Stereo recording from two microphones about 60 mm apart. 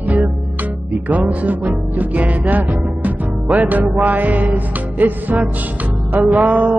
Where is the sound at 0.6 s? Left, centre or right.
Right.